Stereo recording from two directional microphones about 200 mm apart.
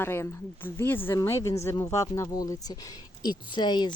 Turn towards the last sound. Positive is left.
turn(degrees=20)  # may be behind; listen again after turning